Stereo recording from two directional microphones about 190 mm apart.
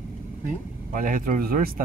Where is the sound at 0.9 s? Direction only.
45° right (ahead or behind).